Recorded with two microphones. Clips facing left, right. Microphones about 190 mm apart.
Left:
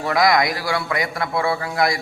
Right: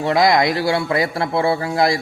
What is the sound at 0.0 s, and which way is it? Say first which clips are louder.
A man's voice: right 3 dB; 25° right (ahead or behind).